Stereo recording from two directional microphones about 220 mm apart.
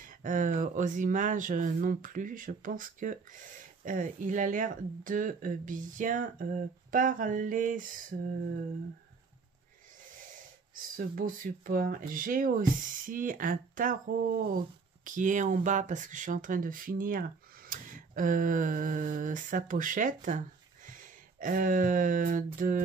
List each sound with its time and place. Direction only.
0.0 s speech: 35° right (ahead or behind)
10.7 s speech: 40° right (ahead or behind)
17.6 s a sound: 40° right (ahead or behind)